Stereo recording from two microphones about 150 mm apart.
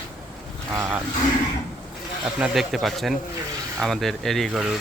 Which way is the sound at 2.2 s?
5° right (ahead or behind).